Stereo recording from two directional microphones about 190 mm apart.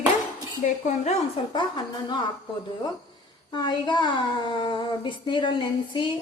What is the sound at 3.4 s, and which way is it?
A woman's voice, 20° left (ahead or behind).